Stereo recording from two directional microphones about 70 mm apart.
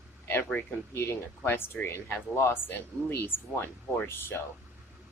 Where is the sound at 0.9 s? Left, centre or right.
Left.